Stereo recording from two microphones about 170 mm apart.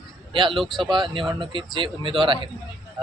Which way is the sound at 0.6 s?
Centre (ahead or behind).